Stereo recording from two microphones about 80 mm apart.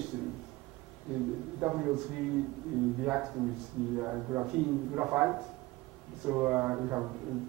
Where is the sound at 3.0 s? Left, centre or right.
Centre.